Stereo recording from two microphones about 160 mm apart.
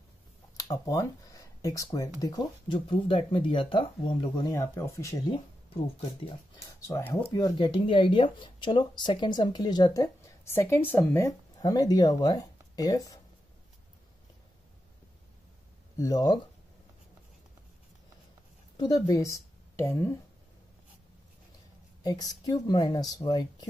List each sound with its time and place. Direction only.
0.6 s speech: 20° left (ahead or behind)
6.9 s speech: 10° left (ahead or behind)
7.4 s speech: 30° left (ahead or behind)
16.0 s speech: 25° left (ahead or behind)
18.8 s speech: 25° left (ahead or behind)
22.0 s speech: 25° left (ahead or behind)